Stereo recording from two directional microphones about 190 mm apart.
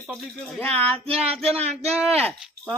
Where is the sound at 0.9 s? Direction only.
30° right (ahead or behind).